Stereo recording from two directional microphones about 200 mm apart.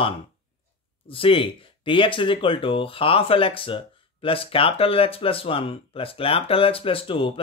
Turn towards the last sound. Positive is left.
turn(degrees=25)  # may be behind; listen again after turning